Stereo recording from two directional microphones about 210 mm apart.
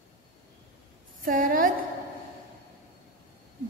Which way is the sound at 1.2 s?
40° right (ahead or behind).